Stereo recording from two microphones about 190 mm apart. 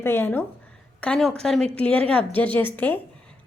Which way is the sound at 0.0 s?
10° left (ahead or behind).